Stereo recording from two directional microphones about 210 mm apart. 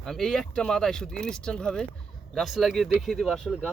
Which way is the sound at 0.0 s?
Centre (ahead or behind).